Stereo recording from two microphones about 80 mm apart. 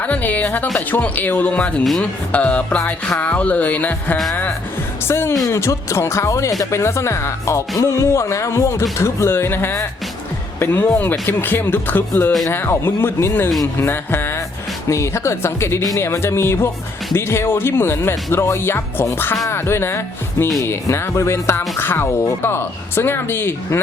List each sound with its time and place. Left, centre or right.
0.0 s speech: centre
5.0 s speech: left
13.7 s music: left
14.8 s speech: left